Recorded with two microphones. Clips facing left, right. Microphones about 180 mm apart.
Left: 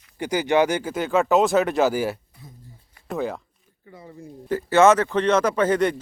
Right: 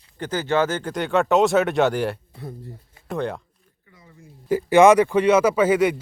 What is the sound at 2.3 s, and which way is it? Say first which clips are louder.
Speech: right 11 dB; 70° right (ahead or behind).